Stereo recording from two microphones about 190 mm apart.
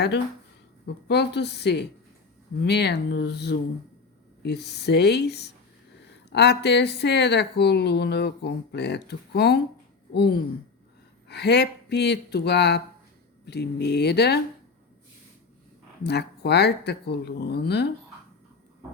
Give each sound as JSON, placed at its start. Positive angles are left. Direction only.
{"t": 1.0, "sound": "a woman's voice", "side_deg": 60}
{"t": 16.0, "sound": "a woman's voice", "side_deg": 60}